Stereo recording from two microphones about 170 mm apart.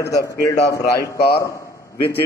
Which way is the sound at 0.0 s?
20° left (ahead or behind).